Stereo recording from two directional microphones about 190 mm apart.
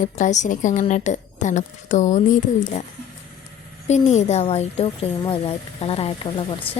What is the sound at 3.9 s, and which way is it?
A woman's voice, 35° left (ahead or behind).